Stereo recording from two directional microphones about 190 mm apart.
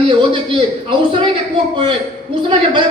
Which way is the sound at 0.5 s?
30° right (ahead or behind).